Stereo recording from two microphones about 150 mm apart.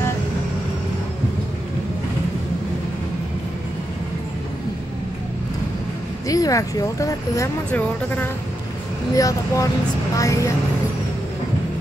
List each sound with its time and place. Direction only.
6.2 s speech: 25° left (ahead or behind)
9.1 s speech: 25° left (ahead or behind)